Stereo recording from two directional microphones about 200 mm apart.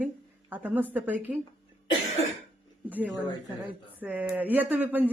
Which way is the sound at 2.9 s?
10° right (ahead or behind).